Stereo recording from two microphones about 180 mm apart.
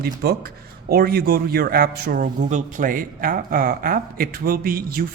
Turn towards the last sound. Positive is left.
turn(degrees=-55)  # may be behind; listen again after turning